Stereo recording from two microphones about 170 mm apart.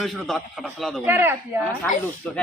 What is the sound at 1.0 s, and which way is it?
Speech, 10° right (ahead or behind).